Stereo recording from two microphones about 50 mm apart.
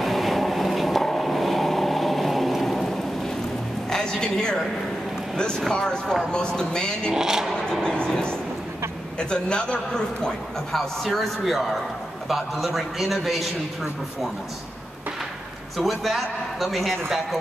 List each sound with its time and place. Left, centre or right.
0.0 s vehicle: centre
3.9 s a sound: centre
5.3 s a man's voice: centre
7.1 s speech: centre
7.5 s train: centre
9.2 s a man's voice: centre
10.8 s a man's voice: centre
15.8 s a man's voice: centre